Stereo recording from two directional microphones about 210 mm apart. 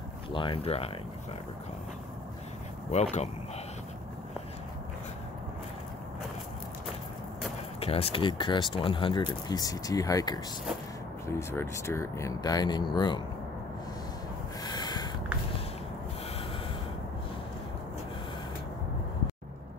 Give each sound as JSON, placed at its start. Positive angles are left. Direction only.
{"t": 0.3, "sound": "speech", "side_deg": 25}
{"t": 2.9, "sound": "speech", "side_deg": 30}
{"t": 7.8, "sound": "speech", "side_deg": 30}
{"t": 14.6, "sound": "snort", "side_deg": 20}